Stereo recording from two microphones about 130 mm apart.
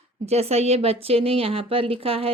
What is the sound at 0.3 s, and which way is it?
Speech, 55° right (ahead or behind).